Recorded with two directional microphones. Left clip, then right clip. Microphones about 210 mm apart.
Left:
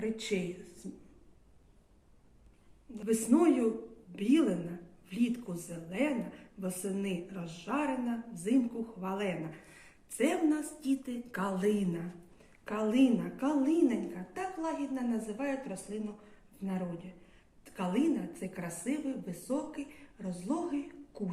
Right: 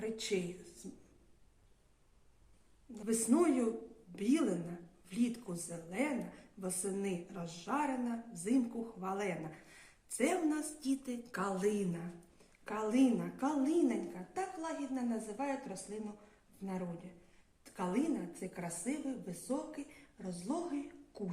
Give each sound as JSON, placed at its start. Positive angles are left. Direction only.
{"t": 0.0, "sound": "a sound", "side_deg": -55}
{"t": 2.9, "sound": "a woman's voice", "side_deg": -55}
{"t": 17.7, "sound": "a woman's voice", "side_deg": -55}